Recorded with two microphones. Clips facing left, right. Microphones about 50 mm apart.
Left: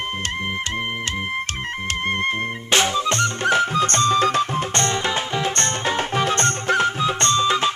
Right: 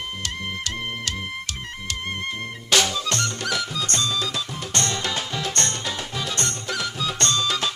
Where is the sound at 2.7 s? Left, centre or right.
Left.